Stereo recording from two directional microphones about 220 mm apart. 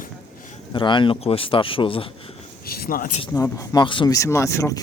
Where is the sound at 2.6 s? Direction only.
45° left (ahead or behind).